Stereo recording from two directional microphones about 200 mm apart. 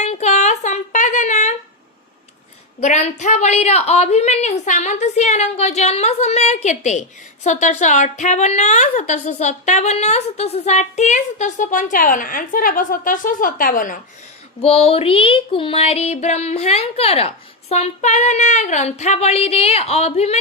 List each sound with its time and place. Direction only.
0.0 s a sound: 35° left (ahead or behind)
2.8 s a woman's voice: 35° left (ahead or behind)
14.6 s a woman's voice: 30° left (ahead or behind)